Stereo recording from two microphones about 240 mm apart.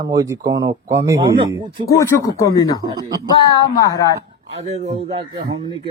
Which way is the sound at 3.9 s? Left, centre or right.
Centre.